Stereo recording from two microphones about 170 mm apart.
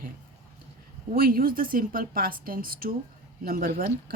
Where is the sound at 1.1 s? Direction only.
60° right (ahead or behind).